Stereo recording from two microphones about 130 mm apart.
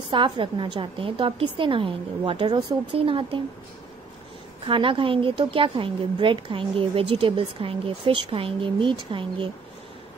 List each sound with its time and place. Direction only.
0.1 s a woman's voice: 40° right (ahead or behind)
4.6 s a woman's voice: 40° right (ahead or behind)